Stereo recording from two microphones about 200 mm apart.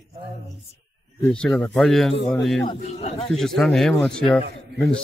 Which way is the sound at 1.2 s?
5° left (ahead or behind).